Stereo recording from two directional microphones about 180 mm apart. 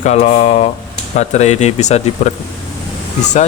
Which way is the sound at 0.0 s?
40° left (ahead or behind).